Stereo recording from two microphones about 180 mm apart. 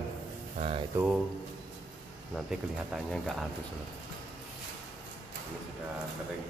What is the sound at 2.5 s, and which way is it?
Speech, centre (ahead or behind).